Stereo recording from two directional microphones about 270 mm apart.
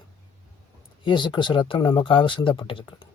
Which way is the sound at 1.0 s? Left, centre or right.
Centre.